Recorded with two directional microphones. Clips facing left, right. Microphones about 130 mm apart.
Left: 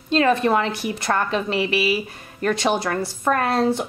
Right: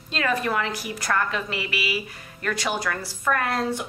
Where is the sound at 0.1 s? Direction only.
25° left (ahead or behind).